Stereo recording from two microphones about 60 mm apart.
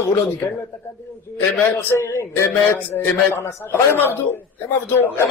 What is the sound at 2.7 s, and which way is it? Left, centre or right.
A man's voice, left.